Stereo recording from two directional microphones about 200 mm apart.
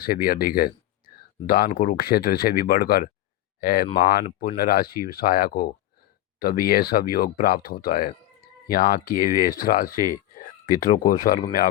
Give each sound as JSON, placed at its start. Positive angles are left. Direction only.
{"t": 0.0, "sound": "speech", "side_deg": 45}